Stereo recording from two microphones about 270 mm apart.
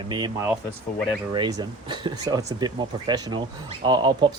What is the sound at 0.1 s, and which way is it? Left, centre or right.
Speech, centre.